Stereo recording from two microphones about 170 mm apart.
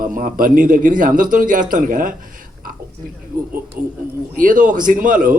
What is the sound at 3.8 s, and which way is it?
A man's voice, 55° right (ahead or behind).